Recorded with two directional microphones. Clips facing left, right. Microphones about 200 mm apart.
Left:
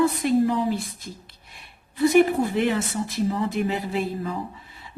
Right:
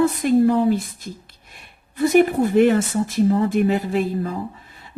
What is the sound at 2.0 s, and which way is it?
A woman's voice, 50° right (ahead or behind).